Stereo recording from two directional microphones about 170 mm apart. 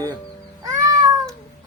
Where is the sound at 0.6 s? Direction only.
20° right (ahead or behind).